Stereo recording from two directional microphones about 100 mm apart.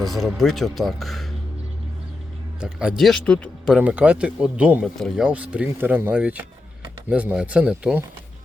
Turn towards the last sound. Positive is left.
turn(degrees=-10)  # may be behind; listen again after turning